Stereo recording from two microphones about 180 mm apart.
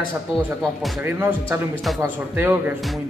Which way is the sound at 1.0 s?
15° right (ahead or behind).